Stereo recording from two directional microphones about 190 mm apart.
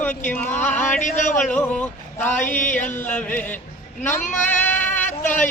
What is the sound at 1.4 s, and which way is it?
A man's voice, 5° left (ahead or behind).